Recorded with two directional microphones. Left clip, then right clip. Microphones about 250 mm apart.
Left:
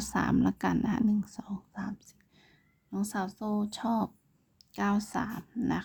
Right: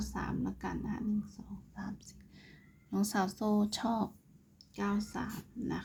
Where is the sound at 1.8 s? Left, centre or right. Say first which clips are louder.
Left 1 dB; left.